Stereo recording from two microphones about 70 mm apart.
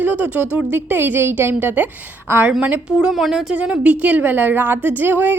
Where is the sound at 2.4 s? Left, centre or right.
Centre.